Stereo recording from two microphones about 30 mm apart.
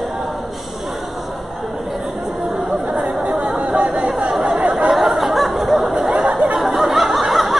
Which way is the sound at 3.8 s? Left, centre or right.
Right.